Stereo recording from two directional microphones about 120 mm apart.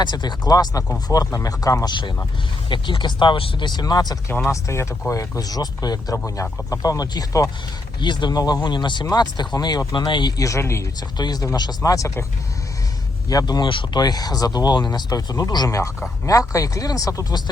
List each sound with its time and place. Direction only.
0.0 s speech: 35° left (ahead or behind)
4.5 s speech: 25° left (ahead or behind)
13.2 s speech: 35° left (ahead or behind)